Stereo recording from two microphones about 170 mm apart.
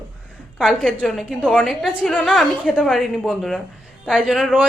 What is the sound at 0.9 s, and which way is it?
A woman's voice, 5° right (ahead or behind).